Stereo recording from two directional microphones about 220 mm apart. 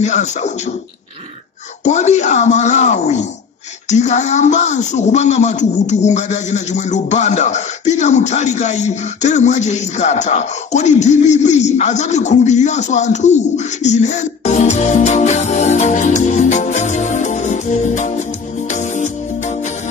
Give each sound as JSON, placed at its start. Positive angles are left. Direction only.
{"t": 0.0, "sound": "a man's voice", "side_deg": 30}
{"t": 1.9, "sound": "a man's voice", "side_deg": 30}
{"t": 13.8, "sound": "music", "side_deg": 30}